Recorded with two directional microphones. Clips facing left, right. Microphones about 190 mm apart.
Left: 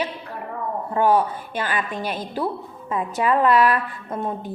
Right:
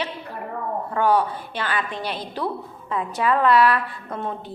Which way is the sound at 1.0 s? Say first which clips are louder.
Left 2 dB; 10° left (ahead or behind).